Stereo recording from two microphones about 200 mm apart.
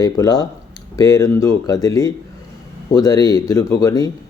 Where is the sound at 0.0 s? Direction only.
20° left (ahead or behind).